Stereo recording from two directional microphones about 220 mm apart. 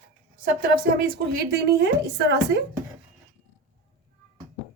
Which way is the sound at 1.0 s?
50° right (ahead or behind).